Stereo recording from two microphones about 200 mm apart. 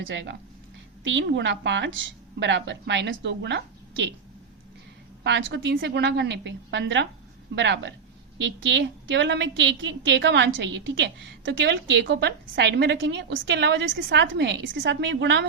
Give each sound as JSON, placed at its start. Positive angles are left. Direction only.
{"t": 0.0, "sound": "a woman's voice", "side_deg": -65}
{"t": 5.2, "sound": "a woman's voice", "side_deg": -65}
{"t": 5.7, "sound": "a woman's voice", "side_deg": -55}